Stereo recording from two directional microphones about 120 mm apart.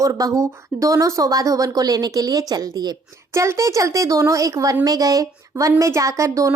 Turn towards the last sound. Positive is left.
turn(degrees=-25)  # may be behind; listen again after turning